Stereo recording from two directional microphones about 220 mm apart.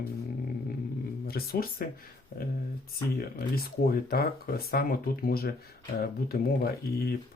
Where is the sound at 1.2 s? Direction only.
45° left (ahead or behind).